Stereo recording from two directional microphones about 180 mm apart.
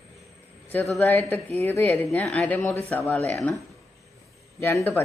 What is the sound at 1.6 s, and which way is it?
Speech, 10° left (ahead or behind).